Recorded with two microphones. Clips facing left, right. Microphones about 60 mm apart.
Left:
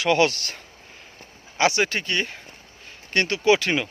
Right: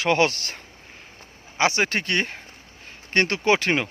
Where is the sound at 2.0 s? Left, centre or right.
Right.